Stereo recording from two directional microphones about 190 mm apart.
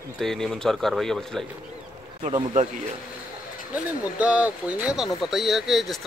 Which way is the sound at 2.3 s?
30° right (ahead or behind).